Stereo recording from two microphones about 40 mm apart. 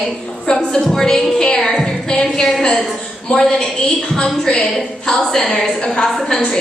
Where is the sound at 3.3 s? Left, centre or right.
Centre.